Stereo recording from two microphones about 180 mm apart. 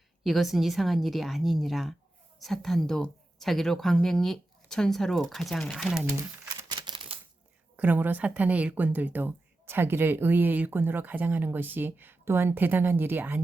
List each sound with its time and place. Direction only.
0.3 s a woman's voice: centre (ahead or behind)
6.7 s typewriter: 25° right (ahead or behind)
7.8 s speech: 10° right (ahead or behind)